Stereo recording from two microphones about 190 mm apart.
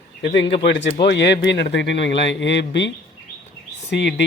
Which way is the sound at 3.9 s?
65° left (ahead or behind).